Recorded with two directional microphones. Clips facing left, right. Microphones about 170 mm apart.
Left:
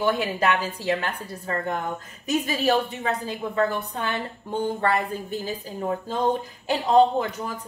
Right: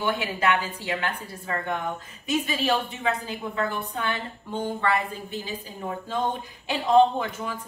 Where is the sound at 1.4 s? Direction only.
40° left (ahead or behind).